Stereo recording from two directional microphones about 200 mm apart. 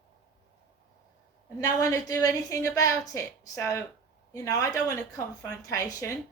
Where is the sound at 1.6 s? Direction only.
15° left (ahead or behind).